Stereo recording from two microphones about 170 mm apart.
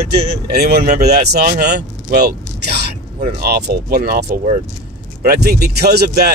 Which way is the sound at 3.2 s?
65° right (ahead or behind).